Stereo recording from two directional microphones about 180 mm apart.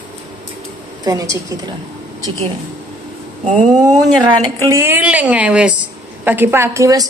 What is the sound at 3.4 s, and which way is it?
Speech, 45° right (ahead or behind).